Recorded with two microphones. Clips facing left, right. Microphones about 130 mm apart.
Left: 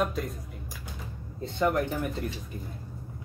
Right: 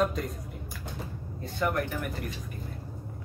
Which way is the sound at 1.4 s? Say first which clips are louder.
Left 3 dB; 20° left (ahead or behind).